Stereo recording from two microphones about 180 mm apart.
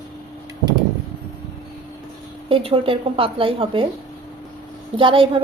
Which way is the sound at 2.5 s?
30° right (ahead or behind).